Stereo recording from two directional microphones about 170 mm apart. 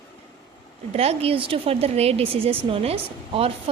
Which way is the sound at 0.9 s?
35° right (ahead or behind).